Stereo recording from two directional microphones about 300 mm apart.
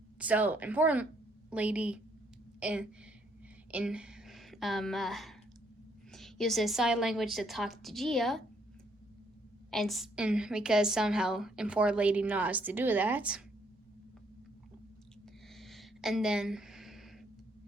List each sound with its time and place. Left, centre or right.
0.2 s a woman's voice: centre
9.7 s a woman's voice: centre
15.5 s a sound: centre